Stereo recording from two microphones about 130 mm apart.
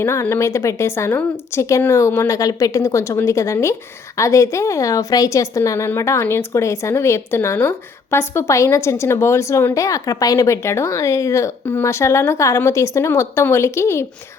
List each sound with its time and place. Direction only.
0.0 s a woman's voice: 20° left (ahead or behind)